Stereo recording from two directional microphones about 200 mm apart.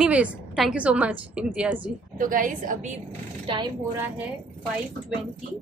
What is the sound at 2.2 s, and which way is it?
Speech, 40° right (ahead or behind).